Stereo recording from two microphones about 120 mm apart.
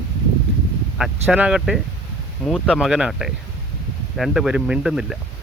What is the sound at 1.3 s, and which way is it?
Speech, 5° right (ahead or behind).